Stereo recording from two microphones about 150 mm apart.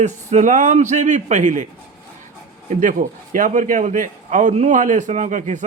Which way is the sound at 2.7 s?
60° right (ahead or behind).